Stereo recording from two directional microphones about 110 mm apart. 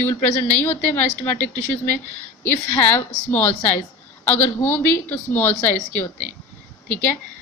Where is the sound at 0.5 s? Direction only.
15° left (ahead or behind).